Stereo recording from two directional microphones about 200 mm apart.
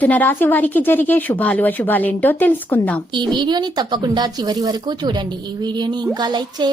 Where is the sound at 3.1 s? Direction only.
20° right (ahead or behind).